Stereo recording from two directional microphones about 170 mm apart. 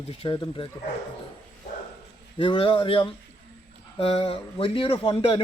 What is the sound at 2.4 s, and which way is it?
A man's voice, 30° left (ahead or behind).